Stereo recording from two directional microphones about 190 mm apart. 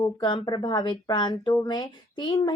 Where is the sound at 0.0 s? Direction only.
25° left (ahead or behind).